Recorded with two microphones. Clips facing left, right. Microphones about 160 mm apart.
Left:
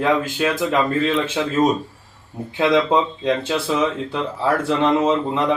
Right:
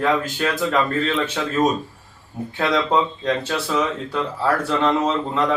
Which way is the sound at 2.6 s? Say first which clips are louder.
Left 3 dB; 20° left (ahead or behind).